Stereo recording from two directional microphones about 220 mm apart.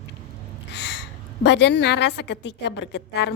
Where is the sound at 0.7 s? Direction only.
50° left (ahead or behind).